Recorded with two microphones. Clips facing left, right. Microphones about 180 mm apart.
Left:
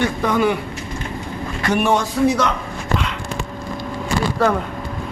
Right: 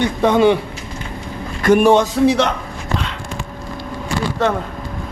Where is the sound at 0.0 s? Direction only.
25° right (ahead or behind).